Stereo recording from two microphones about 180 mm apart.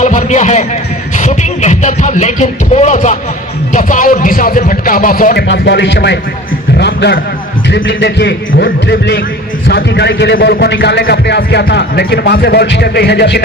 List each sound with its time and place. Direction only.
0.0 s a man's voice: 40° left (ahead or behind); by 6.1 s 75° left (ahead or behind)
6.7 s a sound: 70° left (ahead or behind)
7.7 s a man's voice: 70° left (ahead or behind)